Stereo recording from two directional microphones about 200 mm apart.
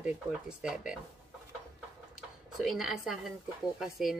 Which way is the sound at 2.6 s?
Centre (ahead or behind).